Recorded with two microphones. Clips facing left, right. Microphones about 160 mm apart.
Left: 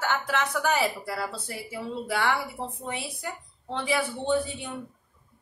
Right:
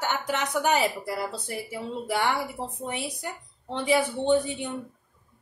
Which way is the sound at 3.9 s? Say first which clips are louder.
Right 4 dB; 20° right (ahead or behind).